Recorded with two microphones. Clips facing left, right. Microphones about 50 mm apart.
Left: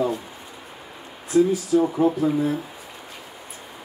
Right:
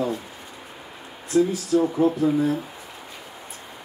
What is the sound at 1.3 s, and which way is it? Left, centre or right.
Speech, centre.